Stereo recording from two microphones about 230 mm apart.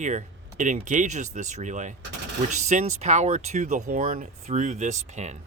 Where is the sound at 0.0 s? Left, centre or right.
Right.